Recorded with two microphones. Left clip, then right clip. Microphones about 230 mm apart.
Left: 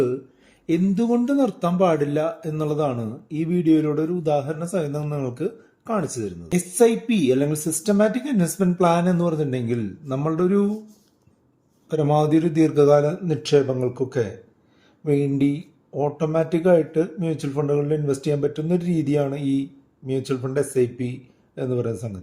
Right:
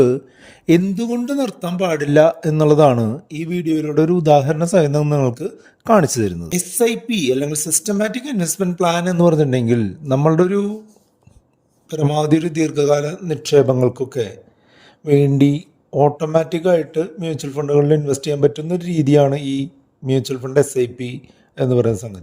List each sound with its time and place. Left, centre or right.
0.7 s speech: right
6.5 s speech: centre
7.2 s speech: right
11.9 s speech: right